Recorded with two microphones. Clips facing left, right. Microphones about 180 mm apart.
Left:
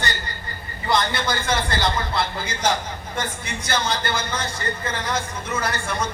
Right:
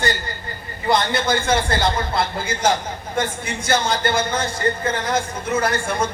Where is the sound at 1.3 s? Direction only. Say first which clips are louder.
Right 6 dB; 25° right (ahead or behind).